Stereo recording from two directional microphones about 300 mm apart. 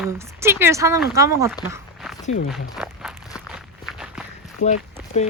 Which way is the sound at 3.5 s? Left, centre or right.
Centre.